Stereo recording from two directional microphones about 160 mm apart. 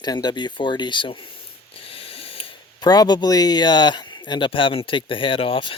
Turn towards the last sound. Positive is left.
turn(degrees=35)  # may be behind; listen again after turning